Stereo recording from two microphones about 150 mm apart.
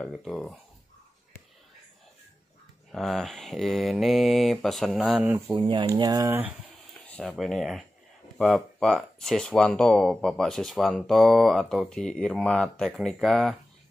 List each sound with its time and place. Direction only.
0.0 s speech: 5° left (ahead or behind)
2.9 s speech: centre (ahead or behind)
5.5 s speech: 35° right (ahead or behind); by 6.5 s 15° right (ahead or behind)
7.1 s a sound: 10° left (ahead or behind)
7.3 s speech: centre (ahead or behind)